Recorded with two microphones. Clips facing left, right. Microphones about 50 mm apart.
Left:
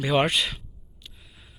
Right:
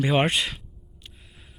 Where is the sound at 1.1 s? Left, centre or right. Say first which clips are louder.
Even; right.